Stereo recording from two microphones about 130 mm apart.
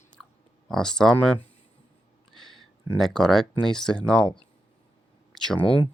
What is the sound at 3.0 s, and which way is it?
Speech, 5° left (ahead or behind).